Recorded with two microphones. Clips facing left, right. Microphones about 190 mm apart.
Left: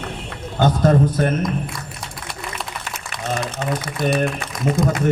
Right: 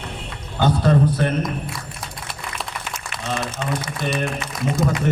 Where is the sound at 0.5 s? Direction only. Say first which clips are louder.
Left 2 dB; 45° left (ahead or behind).